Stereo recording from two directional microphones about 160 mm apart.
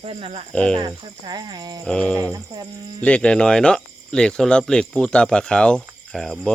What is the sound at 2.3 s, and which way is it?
Speech, 25° right (ahead or behind).